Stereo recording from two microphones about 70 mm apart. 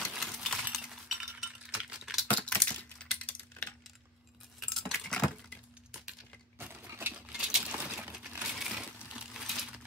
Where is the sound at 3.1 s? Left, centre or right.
Left.